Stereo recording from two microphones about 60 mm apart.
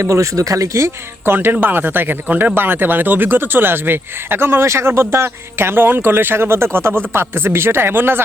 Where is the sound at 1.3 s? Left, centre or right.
Right.